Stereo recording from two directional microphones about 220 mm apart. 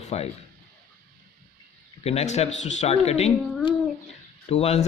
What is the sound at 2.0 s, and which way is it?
A man's voice, 30° left (ahead or behind).